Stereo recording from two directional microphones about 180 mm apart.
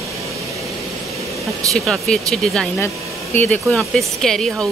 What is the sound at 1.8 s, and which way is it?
Speech, centre (ahead or behind).